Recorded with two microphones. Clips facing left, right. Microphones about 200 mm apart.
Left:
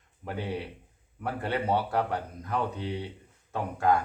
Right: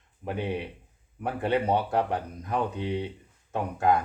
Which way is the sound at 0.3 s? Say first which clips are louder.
Right 3 dB; 20° right (ahead or behind).